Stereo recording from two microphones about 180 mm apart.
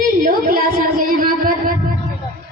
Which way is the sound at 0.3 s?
50° right (ahead or behind).